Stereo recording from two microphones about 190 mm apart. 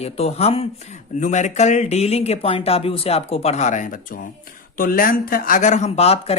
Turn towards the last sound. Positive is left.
turn(degrees=30)  # may be behind; listen again after turning